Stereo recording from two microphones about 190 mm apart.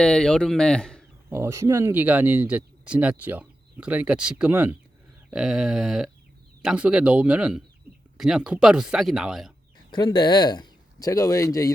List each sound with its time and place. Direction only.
0.0 s speech: 5° left (ahead or behind)
1.3 s speech: 15° right (ahead or behind)
9.9 s speech: 25° left (ahead or behind)